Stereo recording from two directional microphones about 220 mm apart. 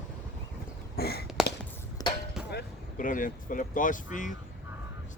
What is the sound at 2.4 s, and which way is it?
Speech, 40° left (ahead or behind).